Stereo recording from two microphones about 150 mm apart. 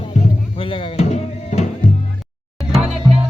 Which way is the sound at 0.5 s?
35° left (ahead or behind).